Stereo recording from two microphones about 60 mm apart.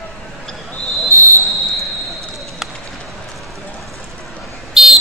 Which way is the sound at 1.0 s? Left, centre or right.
Right.